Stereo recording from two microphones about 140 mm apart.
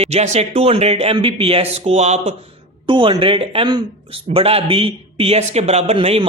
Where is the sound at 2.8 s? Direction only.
35° right (ahead or behind).